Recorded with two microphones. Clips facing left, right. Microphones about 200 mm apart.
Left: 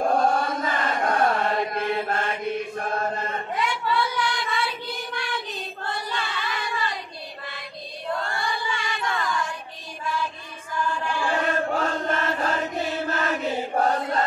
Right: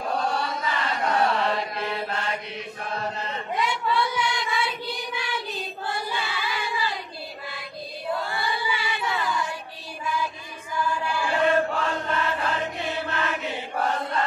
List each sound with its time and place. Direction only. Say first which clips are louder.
0.0 s chant: left 5 dB; 50° left (ahead or behind)
3.5 s child singing: right 1 dB; centre (ahead or behind)
8.1 s crowd: even; 5° right (ahead or behind)
11.4 s chant: right 2 dB; 45° left (ahead or behind)